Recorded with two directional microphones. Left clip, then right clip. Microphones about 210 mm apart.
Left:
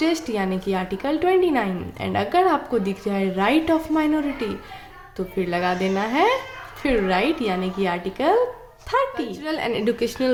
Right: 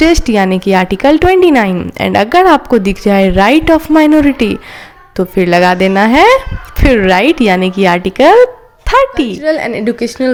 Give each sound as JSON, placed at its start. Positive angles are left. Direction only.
{"t": 0.0, "sound": "a woman's voice", "side_deg": -45}
{"t": 9.4, "sound": "a woman's voice", "side_deg": -25}